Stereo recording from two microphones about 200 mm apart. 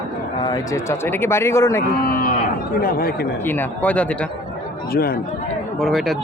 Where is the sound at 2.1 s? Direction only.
45° left (ahead or behind).